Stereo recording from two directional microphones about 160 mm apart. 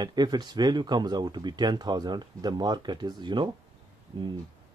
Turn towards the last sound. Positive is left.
turn(degrees=-30)  # may be behind; listen again after turning